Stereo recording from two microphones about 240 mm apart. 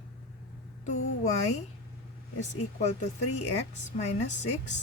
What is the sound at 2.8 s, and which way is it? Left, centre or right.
Speech, left.